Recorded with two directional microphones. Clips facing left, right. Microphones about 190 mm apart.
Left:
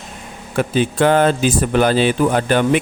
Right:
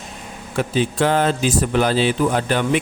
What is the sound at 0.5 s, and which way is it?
Speech, 55° left (ahead or behind).